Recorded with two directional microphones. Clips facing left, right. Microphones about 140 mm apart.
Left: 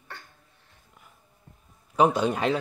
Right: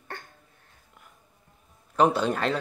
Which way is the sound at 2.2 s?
10° left (ahead or behind).